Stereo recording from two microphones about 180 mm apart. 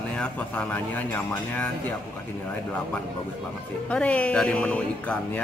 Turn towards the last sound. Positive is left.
turn(degrees=5)  # may be behind; listen again after turning